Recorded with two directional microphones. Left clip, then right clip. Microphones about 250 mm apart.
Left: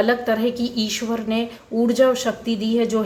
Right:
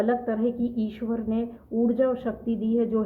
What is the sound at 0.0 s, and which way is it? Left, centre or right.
Speech, centre.